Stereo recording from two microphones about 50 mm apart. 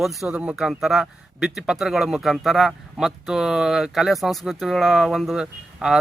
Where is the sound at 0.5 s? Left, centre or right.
Centre.